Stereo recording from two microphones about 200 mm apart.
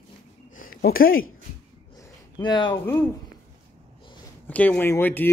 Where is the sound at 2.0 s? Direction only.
20° left (ahead or behind).